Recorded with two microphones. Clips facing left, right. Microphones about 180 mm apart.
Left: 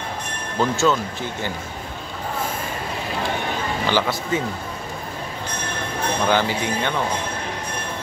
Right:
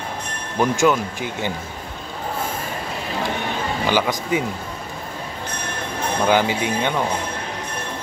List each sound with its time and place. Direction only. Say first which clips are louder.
0.6 s speech: right 2 dB; 15° right (ahead or behind)
3.8 s speech: right 2 dB; 15° right (ahead or behind)
6.2 s speech: right 3 dB; 15° right (ahead or behind)